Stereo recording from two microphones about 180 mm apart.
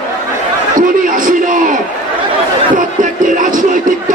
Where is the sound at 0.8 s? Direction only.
50° right (ahead or behind).